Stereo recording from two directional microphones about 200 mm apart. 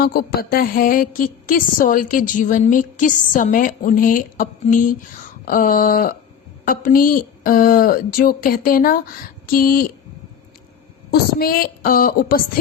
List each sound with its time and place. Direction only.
0.0 s a woman's voice: 50° left (ahead or behind)
11.1 s a woman's voice: 50° left (ahead or behind)